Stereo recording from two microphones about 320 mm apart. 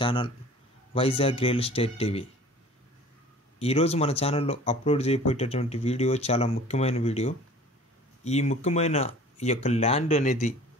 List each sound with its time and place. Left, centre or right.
0.0 s a man's voice: centre
3.5 s speech: centre